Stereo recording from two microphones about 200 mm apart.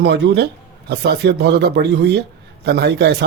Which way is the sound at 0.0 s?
60° right (ahead or behind).